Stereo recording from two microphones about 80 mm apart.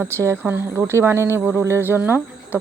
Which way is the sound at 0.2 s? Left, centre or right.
Right.